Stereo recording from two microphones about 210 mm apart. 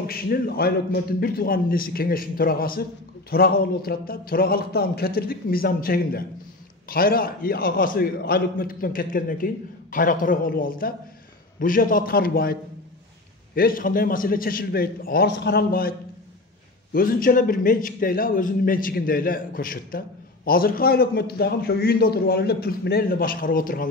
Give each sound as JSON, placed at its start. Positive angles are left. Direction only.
{"t": 0.0, "sound": "a man's voice", "side_deg": 45}
{"t": 13.6, "sound": "a man's voice", "side_deg": 45}
{"t": 16.9, "sound": "a man's voice", "side_deg": 45}